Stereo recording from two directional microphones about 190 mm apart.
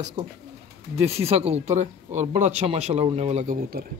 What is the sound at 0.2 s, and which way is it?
Speech, 30° right (ahead or behind).